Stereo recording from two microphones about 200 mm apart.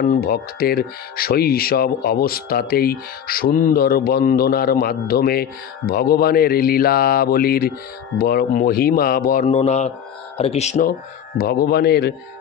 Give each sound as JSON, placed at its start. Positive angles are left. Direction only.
{"t": 0.0, "sound": "speech", "side_deg": 50}
{"t": 11.3, "sound": "speech", "side_deg": 50}